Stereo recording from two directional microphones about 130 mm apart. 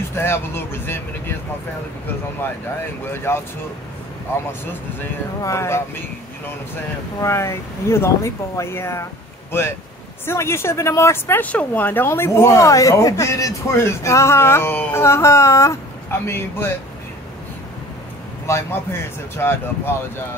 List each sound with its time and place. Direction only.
0.1 s speech: 20° left (ahead or behind)
3.1 s speech: 15° left (ahead or behind)
4.6 s speech: 20° left (ahead or behind)
7.2 s speech: 20° left (ahead or behind)
18.5 s speech: 20° left (ahead or behind)